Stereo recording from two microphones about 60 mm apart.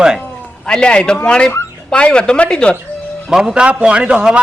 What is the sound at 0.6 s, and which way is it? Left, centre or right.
Speech, centre.